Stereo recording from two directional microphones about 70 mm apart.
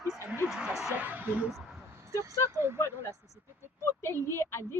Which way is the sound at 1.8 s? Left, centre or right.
Right.